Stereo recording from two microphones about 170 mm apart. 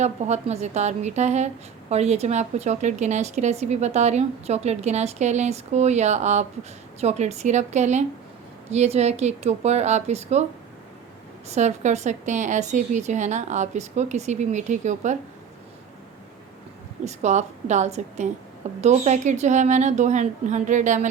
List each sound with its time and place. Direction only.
0.0 s a woman's voice: 40° right (ahead or behind)
11.4 s a woman's voice: 40° right (ahead or behind)
17.1 s a woman's voice: 45° right (ahead or behind)